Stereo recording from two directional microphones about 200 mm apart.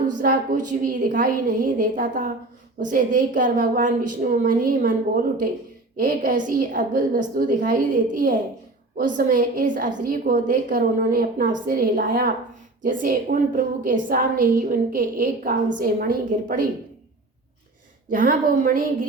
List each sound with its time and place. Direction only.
0.1 s a woman's voice: 40° right (ahead or behind)
18.1 s a woman's voice: 45° right (ahead or behind)